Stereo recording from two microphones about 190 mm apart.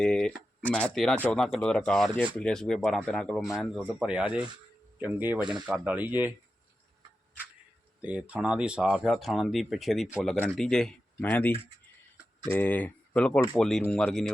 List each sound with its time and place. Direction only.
0.0 s speech: 5° left (ahead or behind)
5.4 s speech: 25° right (ahead or behind)
5.6 s speech: 5° right (ahead or behind)
8.0 s speech: 5° right (ahead or behind)